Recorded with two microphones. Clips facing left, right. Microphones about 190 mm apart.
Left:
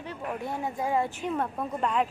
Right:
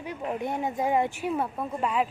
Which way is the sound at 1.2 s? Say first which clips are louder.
Right 1 dB; 10° right (ahead or behind).